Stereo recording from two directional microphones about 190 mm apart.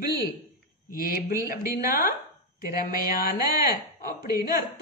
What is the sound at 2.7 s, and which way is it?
Speech, 50° left (ahead or behind).